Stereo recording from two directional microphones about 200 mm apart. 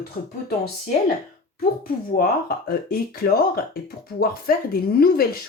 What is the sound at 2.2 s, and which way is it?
Speech, 50° left (ahead or behind).